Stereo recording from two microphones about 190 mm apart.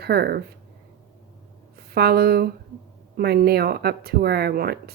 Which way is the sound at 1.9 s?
55° right (ahead or behind).